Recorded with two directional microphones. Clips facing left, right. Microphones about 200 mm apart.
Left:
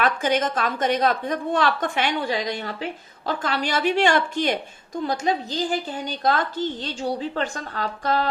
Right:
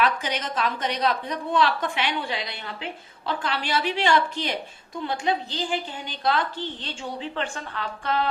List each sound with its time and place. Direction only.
0.0 s a woman's voice: 50° left (ahead or behind)